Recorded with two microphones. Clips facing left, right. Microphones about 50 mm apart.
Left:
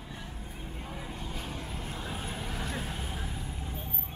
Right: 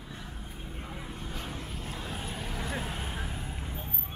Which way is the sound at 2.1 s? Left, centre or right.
Centre.